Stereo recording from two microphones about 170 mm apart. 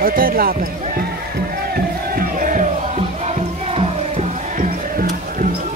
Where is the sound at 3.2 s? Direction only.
35° right (ahead or behind).